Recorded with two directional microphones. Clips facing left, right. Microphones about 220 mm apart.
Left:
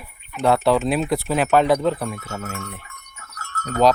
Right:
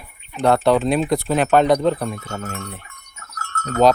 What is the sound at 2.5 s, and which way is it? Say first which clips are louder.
Livestock: right 1 dB; 35° right (ahead or behind).